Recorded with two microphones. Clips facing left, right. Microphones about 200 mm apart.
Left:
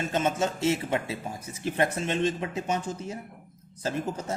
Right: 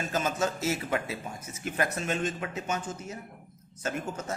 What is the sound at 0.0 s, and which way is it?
A man's voice, 25° left (ahead or behind).